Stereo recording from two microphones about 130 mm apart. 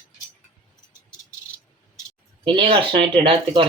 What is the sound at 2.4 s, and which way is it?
Speech, 40° right (ahead or behind).